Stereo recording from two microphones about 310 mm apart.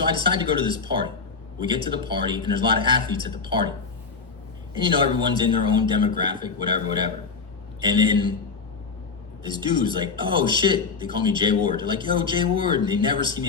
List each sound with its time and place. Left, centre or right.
0.0 s speech: centre
4.8 s speech: centre
9.4 s speech: centre